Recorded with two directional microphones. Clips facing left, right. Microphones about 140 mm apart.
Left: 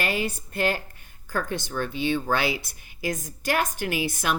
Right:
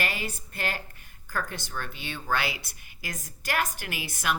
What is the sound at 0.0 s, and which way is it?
A woman's voice, 25° left (ahead or behind).